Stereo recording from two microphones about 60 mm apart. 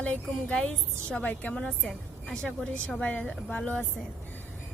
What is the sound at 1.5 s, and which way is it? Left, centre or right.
Speech, centre.